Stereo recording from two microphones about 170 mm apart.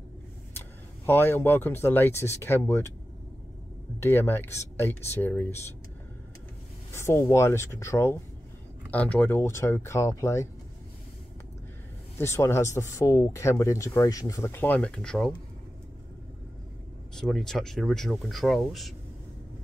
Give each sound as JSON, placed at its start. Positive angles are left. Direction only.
{"t": 0.6, "sound": "speech", "side_deg": 15}
{"t": 4.0, "sound": "speech", "side_deg": 15}
{"t": 6.9, "sound": "speech", "side_deg": 15}
{"t": 12.2, "sound": "speech", "side_deg": 15}
{"t": 17.1, "sound": "speech", "side_deg": 0}